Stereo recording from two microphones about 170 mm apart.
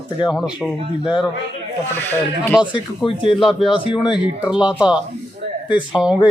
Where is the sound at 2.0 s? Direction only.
10° left (ahead or behind).